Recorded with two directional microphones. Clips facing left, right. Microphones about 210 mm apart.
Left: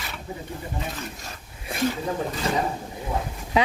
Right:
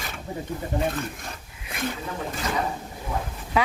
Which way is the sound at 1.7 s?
30° left (ahead or behind).